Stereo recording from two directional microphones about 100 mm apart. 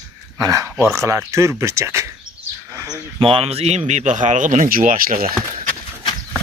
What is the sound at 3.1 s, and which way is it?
Speech, 65° right (ahead or behind).